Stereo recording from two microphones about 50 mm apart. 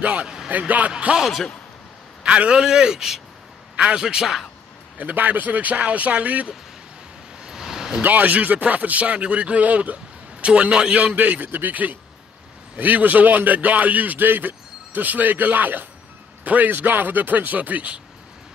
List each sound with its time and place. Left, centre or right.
0.0 s a man's voice: right
0.9 s a man's voice: right
1.2 s speech: centre
2.2 s a man's voice: right
2.5 s speech: centre
3.7 s a man's voice: right
4.0 s speech: centre
4.9 s speech: right
7.4 s vehicle: centre
8.0 s a man's voice: right; by 11.0 s centre
11.1 s speech: right